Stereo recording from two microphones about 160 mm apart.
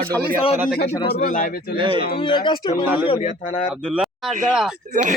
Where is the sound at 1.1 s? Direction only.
60° left (ahead or behind).